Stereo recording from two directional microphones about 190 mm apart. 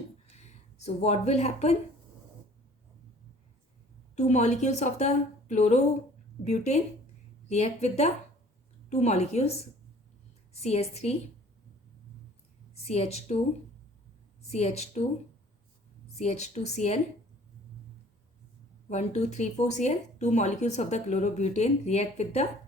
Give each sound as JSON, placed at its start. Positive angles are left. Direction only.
{"t": 0.3, "sound": "speech", "side_deg": 35}
{"t": 4.1, "sound": "speech", "side_deg": 35}
{"t": 12.7, "sound": "a woman's voice", "side_deg": 35}
{"t": 14.4, "sound": "speech", "side_deg": 35}
{"t": 16.1, "sound": "speech", "side_deg": 35}
{"t": 18.9, "sound": "speech", "side_deg": 35}